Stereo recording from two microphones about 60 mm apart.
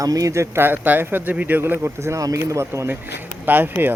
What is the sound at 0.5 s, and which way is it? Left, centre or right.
Speech, right.